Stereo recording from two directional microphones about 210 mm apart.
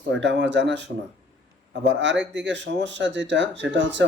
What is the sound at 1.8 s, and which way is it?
Speech, 60° right (ahead or behind).